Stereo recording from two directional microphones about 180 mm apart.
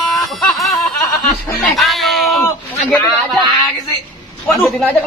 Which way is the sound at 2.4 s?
15° left (ahead or behind).